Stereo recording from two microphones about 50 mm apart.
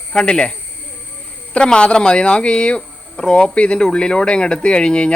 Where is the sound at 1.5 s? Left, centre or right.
Centre.